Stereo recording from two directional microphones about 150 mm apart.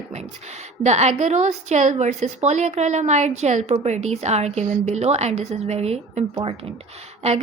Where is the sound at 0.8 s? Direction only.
50° right (ahead or behind).